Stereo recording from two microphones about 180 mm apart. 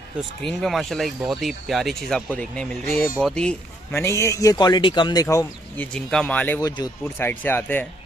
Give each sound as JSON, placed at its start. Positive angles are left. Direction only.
{"t": 0.4, "sound": "a man's voice", "side_deg": 0}
{"t": 5.9, "sound": "a man's voice", "side_deg": 5}